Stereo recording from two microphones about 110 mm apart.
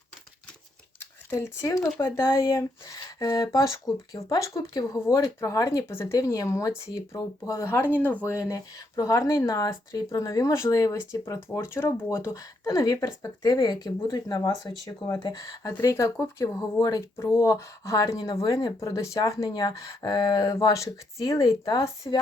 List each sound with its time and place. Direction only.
1.3 s speech: 25° left (ahead or behind)
11.5 s speech: 25° left (ahead or behind)